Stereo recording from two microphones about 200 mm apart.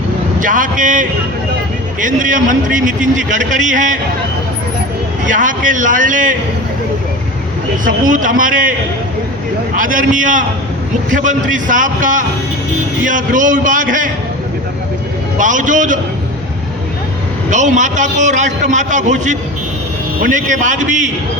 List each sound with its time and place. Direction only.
0.3 s a man's voice: 40° right (ahead or behind)
5.2 s a man's voice: 40° right (ahead or behind)
7.9 s a man's voice: 40° right (ahead or behind)
9.7 s a man's voice: 40° right (ahead or behind)
15.4 s a man's voice: 40° right (ahead or behind)
17.5 s a man's voice: 40° right (ahead or behind)